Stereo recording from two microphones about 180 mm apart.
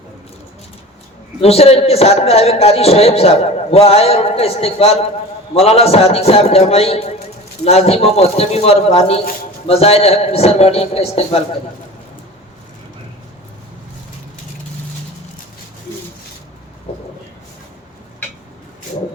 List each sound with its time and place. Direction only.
1.4 s a man's voice: 35° left (ahead or behind)